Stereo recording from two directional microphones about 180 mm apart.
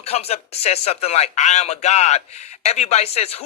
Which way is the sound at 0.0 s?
35° left (ahead or behind).